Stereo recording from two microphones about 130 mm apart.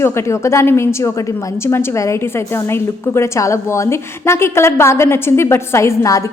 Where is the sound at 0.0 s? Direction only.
20° left (ahead or behind).